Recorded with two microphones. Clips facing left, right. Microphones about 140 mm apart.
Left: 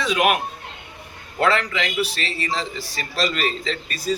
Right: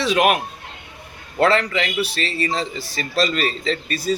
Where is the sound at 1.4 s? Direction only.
30° right (ahead or behind).